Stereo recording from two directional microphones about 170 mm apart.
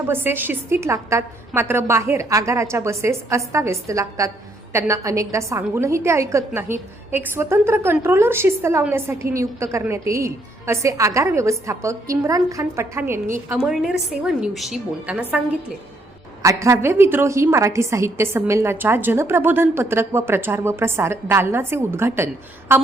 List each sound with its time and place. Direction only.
0.1 s a woman's voice: 10° right (ahead or behind)
16.4 s a woman's voice: 20° right (ahead or behind)